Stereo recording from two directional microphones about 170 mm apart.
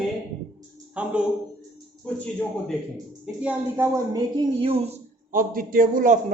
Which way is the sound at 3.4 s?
10° right (ahead or behind).